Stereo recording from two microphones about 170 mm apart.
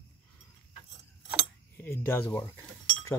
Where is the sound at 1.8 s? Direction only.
15° left (ahead or behind).